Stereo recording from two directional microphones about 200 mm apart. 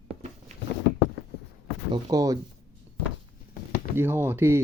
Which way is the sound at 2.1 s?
20° right (ahead or behind).